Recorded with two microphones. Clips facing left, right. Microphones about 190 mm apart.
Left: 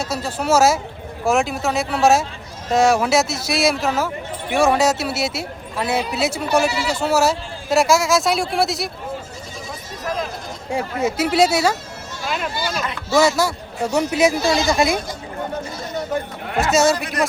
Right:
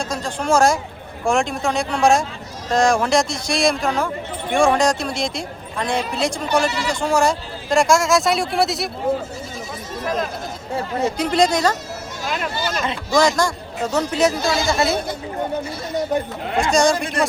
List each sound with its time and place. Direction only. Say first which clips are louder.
0.0 s a man's voice: left 1 dB; 5° left (ahead or behind)
10.7 s a man's voice: left 1 dB; 10° left (ahead or behind)
16.6 s a man's voice: even; 5° left (ahead or behind)